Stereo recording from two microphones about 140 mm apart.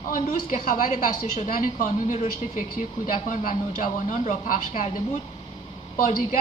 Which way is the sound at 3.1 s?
75° left (ahead or behind).